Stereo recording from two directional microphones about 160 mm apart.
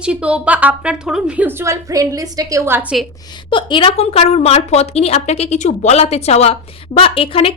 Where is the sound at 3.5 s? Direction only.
30° left (ahead or behind).